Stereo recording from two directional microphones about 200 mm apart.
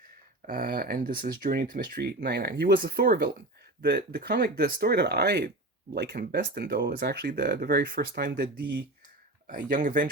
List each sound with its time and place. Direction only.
0.4 s speech: 45° right (ahead or behind)